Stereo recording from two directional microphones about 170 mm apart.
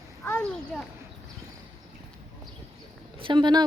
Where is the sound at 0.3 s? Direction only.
5° left (ahead or behind).